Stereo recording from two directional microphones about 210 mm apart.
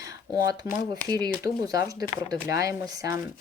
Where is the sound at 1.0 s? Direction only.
20° right (ahead or behind).